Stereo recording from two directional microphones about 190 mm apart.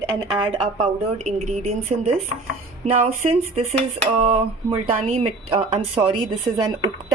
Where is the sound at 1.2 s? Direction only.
40° right (ahead or behind).